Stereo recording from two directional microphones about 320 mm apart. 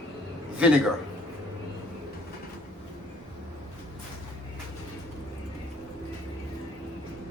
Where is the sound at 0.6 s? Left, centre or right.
Centre.